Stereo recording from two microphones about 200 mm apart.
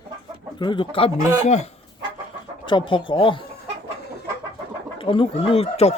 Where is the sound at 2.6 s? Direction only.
25° left (ahead or behind).